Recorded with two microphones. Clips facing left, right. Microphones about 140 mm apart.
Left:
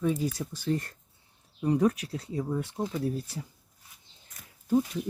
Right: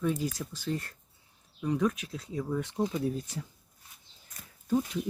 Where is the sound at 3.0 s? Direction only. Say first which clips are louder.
Left 1 dB; 5° left (ahead or behind).